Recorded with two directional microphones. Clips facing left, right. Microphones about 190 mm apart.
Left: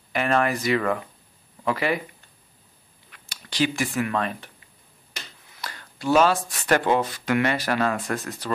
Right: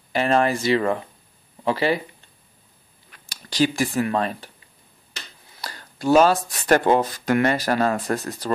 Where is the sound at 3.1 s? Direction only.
40° right (ahead or behind).